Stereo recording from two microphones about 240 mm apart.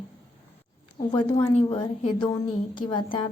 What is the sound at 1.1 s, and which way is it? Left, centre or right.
A woman's voice, centre.